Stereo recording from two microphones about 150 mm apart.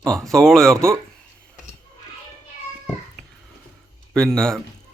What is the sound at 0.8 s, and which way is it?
Speech, 20° right (ahead or behind).